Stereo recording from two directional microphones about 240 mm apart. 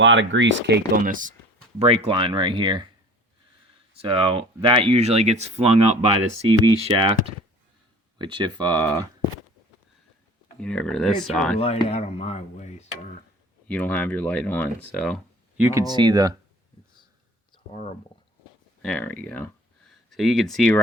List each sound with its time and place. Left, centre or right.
0.0 s speech: right; by 2.8 s centre
3.9 s speech: right
10.6 s speech: centre
11.6 s speech: left
13.7 s speech: centre
15.6 s speech: centre
17.5 s a sound: left
18.8 s speech: centre